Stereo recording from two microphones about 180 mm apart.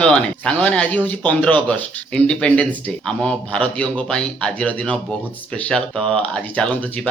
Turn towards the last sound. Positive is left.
turn(degrees=5)  # may be behind; listen again after turning